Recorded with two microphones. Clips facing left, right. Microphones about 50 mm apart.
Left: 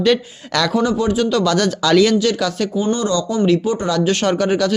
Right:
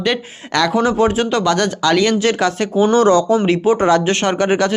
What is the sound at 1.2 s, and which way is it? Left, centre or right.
Speech, right.